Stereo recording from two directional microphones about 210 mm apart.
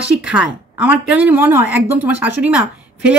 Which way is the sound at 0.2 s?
5° right (ahead or behind).